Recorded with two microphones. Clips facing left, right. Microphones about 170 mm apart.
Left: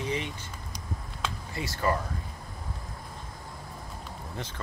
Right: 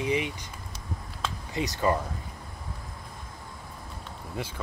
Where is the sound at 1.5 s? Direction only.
20° right (ahead or behind).